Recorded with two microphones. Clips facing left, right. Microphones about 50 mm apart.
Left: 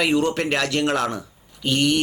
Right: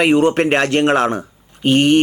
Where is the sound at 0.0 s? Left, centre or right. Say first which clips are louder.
Right 7 dB; right.